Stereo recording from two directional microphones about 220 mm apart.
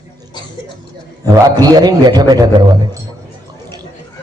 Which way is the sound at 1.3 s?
20° right (ahead or behind).